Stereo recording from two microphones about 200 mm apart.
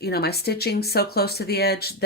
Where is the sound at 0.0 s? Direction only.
55° left (ahead or behind).